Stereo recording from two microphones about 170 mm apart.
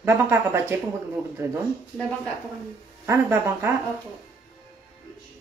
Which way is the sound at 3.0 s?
15° right (ahead or behind).